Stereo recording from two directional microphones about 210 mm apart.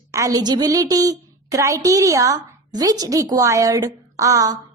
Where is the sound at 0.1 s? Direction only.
15° right (ahead or behind).